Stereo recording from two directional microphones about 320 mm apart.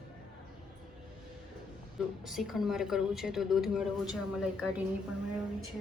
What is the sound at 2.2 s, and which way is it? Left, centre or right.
Speech, centre.